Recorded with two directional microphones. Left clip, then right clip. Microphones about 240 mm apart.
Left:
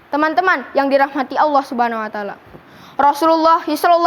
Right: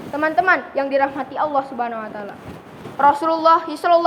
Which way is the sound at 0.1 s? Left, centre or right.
Left.